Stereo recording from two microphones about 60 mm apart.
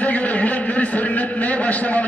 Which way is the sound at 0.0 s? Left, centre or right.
Left.